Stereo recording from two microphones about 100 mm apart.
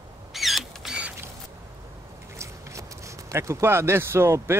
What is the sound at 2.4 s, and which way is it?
Speech, 30° right (ahead or behind).